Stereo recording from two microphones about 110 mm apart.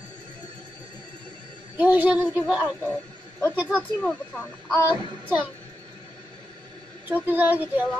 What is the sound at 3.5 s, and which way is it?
Child singing, 10° right (ahead or behind).